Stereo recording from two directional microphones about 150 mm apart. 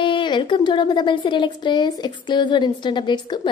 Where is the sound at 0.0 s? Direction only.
30° left (ahead or behind).